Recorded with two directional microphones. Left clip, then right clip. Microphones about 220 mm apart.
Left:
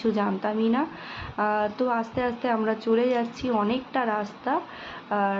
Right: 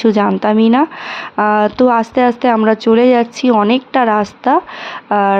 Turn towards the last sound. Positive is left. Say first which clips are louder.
# right 13 dB
turn(degrees=-50)  # may be behind; listen again after turning